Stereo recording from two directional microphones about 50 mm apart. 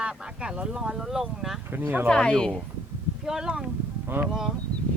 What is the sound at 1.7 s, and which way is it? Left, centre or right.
Speech, right.